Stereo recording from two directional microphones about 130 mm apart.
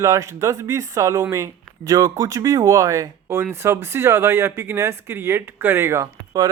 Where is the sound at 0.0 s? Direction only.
25° right (ahead or behind).